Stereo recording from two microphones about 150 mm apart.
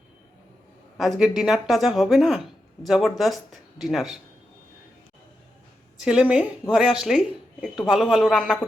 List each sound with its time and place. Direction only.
0.9 s speech: centre (ahead or behind)
6.1 s speech: 5° right (ahead or behind)